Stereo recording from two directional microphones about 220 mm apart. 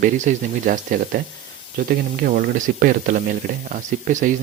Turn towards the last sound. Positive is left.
turn(degrees=-35)  # may be behind; listen again after turning